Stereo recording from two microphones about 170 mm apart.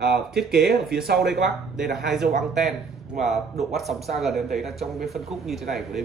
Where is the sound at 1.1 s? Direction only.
Centre (ahead or behind).